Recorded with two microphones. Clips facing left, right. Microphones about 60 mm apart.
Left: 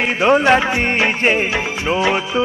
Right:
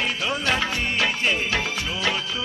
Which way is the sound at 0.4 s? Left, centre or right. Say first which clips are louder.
Left 10 dB; left.